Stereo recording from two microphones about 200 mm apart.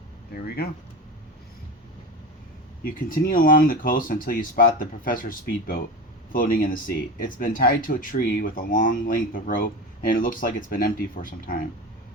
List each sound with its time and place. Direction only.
0.4 s speech: 55° left (ahead or behind)
2.8 s speech: 45° left (ahead or behind)